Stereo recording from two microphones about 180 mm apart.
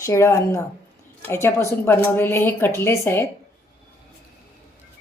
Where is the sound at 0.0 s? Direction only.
15° left (ahead or behind).